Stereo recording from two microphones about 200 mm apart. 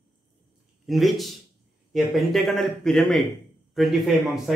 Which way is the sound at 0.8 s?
Centre (ahead or behind).